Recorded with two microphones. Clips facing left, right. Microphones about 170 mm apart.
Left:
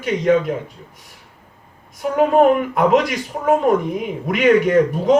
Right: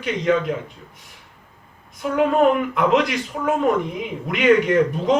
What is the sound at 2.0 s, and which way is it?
Speech, 45° left (ahead or behind).